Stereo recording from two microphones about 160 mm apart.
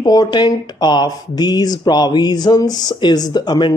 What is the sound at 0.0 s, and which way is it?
Speech, 25° left (ahead or behind).